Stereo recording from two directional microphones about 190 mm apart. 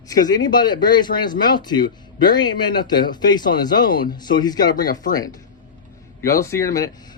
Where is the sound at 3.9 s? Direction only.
50° left (ahead or behind).